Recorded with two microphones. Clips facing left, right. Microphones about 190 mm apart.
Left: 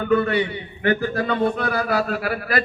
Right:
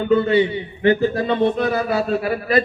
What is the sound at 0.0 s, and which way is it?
A man's voice, 25° right (ahead or behind).